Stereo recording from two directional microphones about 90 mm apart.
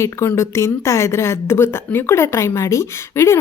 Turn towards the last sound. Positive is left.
turn(degrees=30)  # may be behind; listen again after turning